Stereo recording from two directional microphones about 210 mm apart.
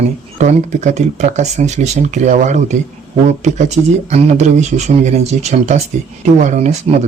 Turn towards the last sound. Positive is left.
turn(degrees=-35)  # may be behind; listen again after turning